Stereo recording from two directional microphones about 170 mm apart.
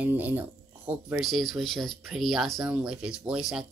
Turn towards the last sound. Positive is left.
turn(degrees=-5)  # may be behind; listen again after turning